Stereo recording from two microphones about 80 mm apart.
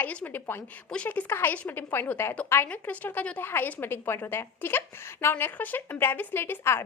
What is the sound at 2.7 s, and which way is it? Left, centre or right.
A woman's voice, centre.